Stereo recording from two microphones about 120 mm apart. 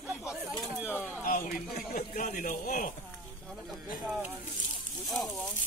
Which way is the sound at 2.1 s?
90° left.